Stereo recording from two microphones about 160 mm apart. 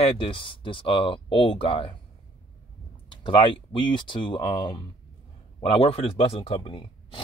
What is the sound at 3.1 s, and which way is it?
Speech, 30° left (ahead or behind).